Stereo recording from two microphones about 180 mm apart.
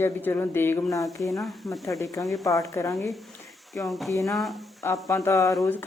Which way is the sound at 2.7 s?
15° left (ahead or behind).